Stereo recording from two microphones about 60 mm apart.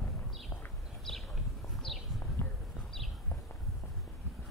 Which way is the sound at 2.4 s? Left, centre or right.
Left.